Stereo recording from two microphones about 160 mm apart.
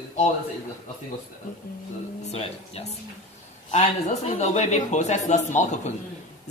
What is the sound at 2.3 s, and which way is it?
A man's voice, 40° left (ahead or behind).